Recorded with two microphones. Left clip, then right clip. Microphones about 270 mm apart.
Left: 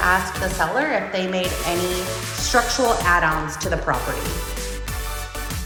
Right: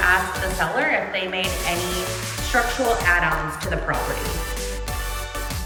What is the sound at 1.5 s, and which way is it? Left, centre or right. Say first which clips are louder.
Music: left 1 dB; centre.